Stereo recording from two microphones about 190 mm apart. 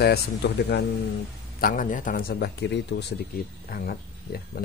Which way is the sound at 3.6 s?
50° left (ahead or behind).